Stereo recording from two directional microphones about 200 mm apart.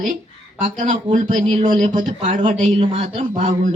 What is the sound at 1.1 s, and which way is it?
Speech, 40° right (ahead or behind).